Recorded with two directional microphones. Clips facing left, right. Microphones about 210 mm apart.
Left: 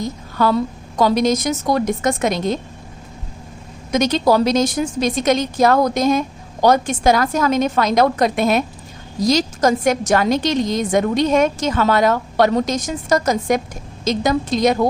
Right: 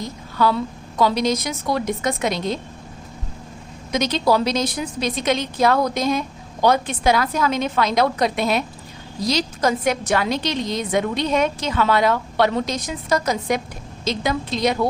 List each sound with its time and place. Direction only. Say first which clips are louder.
0.3 s a woman's voice: left 2 dB; 45° left (ahead or behind)
3.9 s a woman's voice: left 4 dB; 45° left (ahead or behind)